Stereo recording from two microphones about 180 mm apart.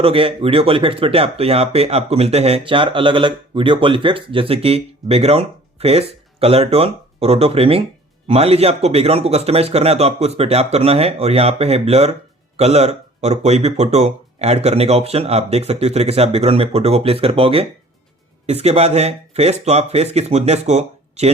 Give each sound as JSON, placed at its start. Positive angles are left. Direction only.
{"t": 0.0, "sound": "speech", "side_deg": -30}